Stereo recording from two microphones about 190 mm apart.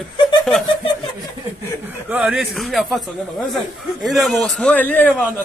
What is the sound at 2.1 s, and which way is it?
A man's voice, 5° right (ahead or behind).